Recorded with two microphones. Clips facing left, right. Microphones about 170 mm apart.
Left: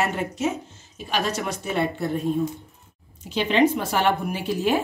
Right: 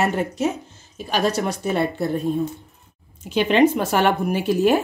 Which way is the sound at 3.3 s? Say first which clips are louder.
Right 3 dB; 50° right (ahead or behind).